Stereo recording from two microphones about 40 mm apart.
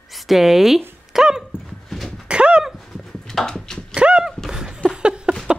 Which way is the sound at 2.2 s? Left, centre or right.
Right.